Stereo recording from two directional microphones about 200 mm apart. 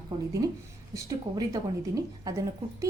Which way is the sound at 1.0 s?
15° right (ahead or behind).